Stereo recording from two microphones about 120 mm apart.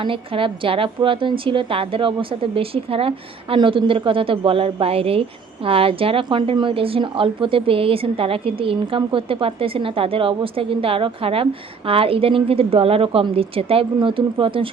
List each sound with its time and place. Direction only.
0.0 s a woman's voice: 45° right (ahead or behind)